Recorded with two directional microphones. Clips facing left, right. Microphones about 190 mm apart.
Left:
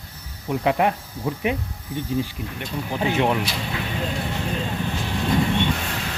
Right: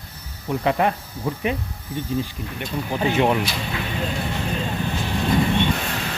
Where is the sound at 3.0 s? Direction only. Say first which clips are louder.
Right 2 dB; 5° right (ahead or behind).